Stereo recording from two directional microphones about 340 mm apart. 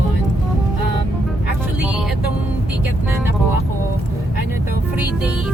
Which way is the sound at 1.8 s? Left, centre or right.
Centre.